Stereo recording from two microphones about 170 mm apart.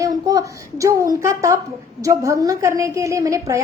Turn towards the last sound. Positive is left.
turn(degrees=-20)  # may be behind; listen again after turning